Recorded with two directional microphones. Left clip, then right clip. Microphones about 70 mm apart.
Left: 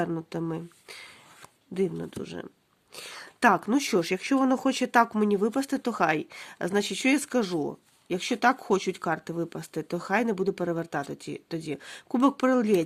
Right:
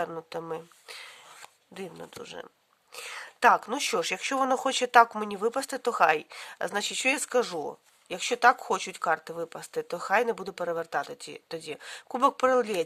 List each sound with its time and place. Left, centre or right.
0.0 s speech: centre
0.9 s a sound: centre
2.0 s a woman's voice: centre; by 12.8 s right